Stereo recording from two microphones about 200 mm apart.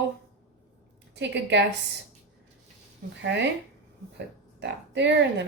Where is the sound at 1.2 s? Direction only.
60° right (ahead or behind).